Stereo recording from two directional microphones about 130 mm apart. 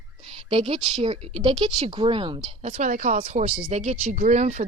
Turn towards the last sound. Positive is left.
turn(degrees=-65)  # may be behind; listen again after turning